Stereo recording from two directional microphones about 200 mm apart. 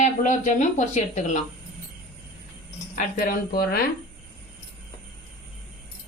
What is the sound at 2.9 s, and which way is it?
Speech, 45° left (ahead or behind).